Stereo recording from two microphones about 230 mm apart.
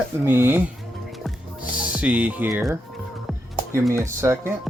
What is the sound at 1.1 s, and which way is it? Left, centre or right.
Music, centre.